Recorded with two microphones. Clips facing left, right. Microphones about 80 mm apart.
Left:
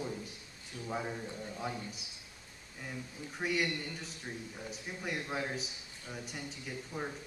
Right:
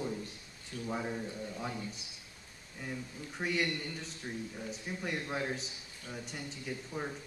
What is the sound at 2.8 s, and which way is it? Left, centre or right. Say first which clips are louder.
A man's voice: right 2 dB; centre.